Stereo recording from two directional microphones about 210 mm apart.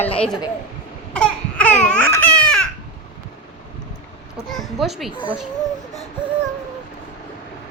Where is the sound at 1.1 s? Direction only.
5° left (ahead or behind).